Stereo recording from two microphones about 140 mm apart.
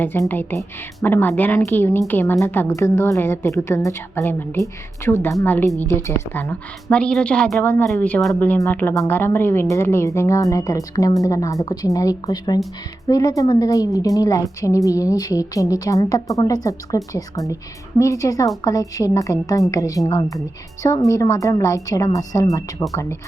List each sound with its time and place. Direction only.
0.0 s speech: 15° left (ahead or behind)
8.4 s speech: 15° left (ahead or behind)
21.1 s speech: 25° left (ahead or behind)